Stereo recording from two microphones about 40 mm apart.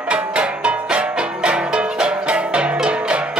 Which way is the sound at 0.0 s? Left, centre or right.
Right.